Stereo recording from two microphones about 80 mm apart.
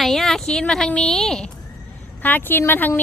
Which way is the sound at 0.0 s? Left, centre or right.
Centre.